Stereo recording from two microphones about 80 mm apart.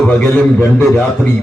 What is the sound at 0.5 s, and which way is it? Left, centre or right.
Speech, centre.